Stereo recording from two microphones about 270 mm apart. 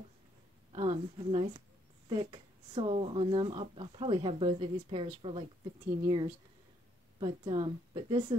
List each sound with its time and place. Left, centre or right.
0.7 s a woman's voice: right